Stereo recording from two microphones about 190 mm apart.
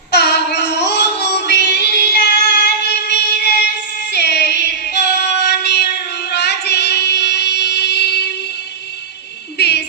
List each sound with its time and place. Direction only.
0.1 s child singing: 65° left (ahead or behind)
6.3 s singing: 60° left (ahead or behind)
9.6 s a sound: 60° left (ahead or behind)